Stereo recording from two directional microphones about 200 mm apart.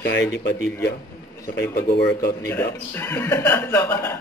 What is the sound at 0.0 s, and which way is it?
Speech, 60° left (ahead or behind).